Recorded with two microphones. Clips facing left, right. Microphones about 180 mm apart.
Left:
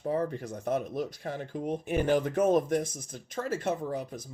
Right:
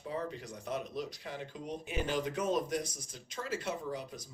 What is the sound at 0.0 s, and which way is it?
Speech, 50° left (ahead or behind).